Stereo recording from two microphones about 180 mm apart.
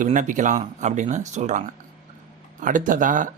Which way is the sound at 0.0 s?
45° right (ahead or behind).